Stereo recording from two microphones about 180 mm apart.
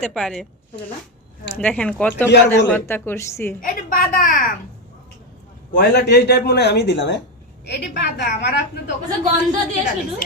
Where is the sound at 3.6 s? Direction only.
50° left (ahead or behind).